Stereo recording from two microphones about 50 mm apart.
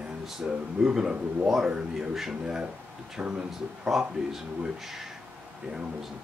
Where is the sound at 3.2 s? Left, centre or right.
Centre.